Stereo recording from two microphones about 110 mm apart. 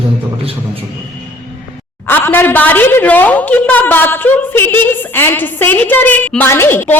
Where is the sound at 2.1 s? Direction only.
20° left (ahead or behind).